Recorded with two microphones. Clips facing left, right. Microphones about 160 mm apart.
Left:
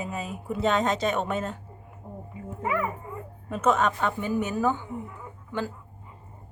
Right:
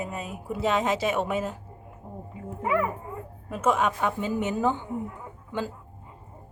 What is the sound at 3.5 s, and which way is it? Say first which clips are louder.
A woman's voice: left 1 dB; 10° right (ahead or behind).